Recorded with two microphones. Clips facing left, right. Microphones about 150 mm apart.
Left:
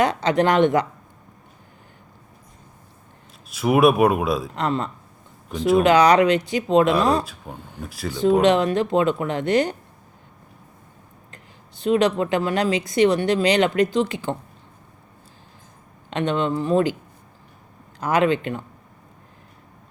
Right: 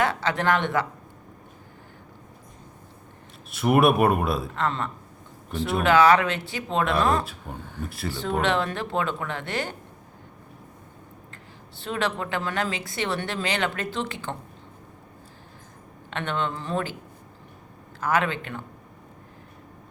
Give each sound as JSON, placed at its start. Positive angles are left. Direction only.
{"t": 0.0, "sound": "speech", "side_deg": 20}
{"t": 3.5, "sound": "speech", "side_deg": 0}
{"t": 4.5, "sound": "speech", "side_deg": 20}
{"t": 7.5, "sound": "speech", "side_deg": 10}
{"t": 8.4, "sound": "speech", "side_deg": 15}
{"t": 11.8, "sound": "speech", "side_deg": 15}
{"t": 16.0, "sound": "speech", "side_deg": 15}
{"t": 18.0, "sound": "speech", "side_deg": 20}